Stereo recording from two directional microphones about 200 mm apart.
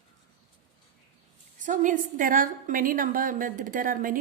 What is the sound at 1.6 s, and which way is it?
A woman's voice, 40° right (ahead or behind).